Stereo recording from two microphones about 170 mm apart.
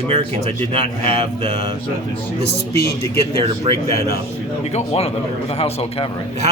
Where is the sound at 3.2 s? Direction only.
35° right (ahead or behind).